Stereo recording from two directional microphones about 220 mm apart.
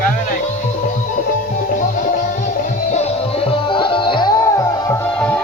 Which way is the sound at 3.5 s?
25° left (ahead or behind).